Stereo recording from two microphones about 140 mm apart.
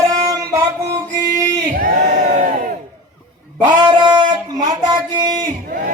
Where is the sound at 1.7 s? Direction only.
85° right.